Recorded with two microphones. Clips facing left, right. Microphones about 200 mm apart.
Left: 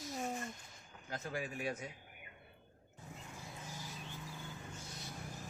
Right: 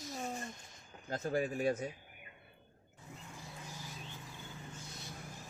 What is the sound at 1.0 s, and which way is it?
Speech, 40° right (ahead or behind).